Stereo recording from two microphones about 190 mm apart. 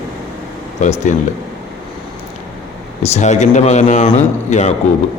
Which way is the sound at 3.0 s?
35° left (ahead or behind).